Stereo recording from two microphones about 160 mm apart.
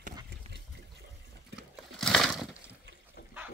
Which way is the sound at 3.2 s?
75° left (ahead or behind).